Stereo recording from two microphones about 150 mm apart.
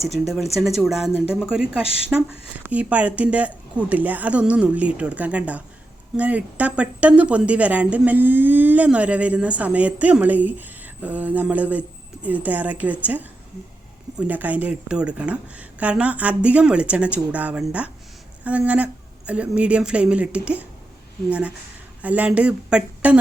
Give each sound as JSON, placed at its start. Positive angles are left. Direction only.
{"t": 0.1, "sound": "speech", "side_deg": 0}